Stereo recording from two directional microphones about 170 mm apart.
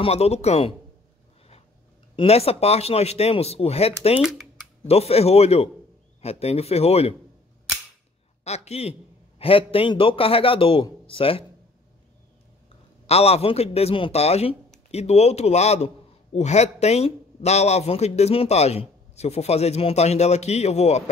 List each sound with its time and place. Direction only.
0.0 s a man's voice: 40° left (ahead or behind)
2.1 s a man's voice: 35° left (ahead or behind)
4.2 s speech: 5° right (ahead or behind)
4.8 s a man's voice: 35° left (ahead or behind)
8.5 s a man's voice: 40° left (ahead or behind)
13.0 s a man's voice: 40° left (ahead or behind)